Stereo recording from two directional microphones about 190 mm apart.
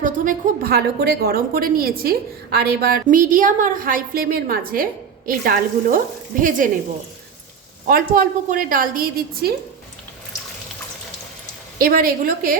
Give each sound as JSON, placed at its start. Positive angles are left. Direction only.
{"t": 0.0, "sound": "a woman's voice", "side_deg": -50}
{"t": 7.9, "sound": "a woman's voice", "side_deg": -50}
{"t": 11.8, "sound": "a woman's voice", "side_deg": -50}